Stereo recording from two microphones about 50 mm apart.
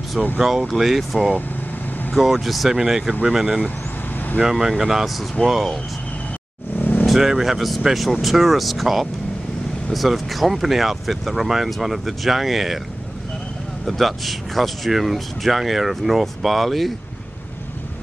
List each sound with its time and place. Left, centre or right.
0.4 s speech: centre
6.8 s vehicle: left
7.1 s speech: centre
13.8 s speech: centre